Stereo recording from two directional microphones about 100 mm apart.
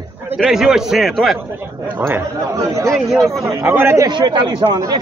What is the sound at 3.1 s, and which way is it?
Speech, centre (ahead or behind).